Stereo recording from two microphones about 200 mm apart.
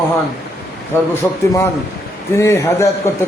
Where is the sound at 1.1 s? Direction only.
15° left (ahead or behind).